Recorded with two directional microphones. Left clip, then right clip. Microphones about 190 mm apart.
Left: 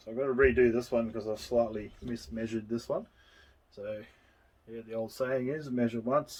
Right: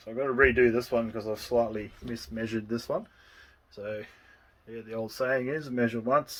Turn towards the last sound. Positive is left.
turn(degrees=-10)  # may be behind; listen again after turning